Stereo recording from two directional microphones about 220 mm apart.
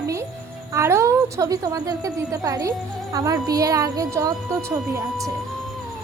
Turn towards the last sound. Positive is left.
turn(degrees=-15)  # may be behind; listen again after turning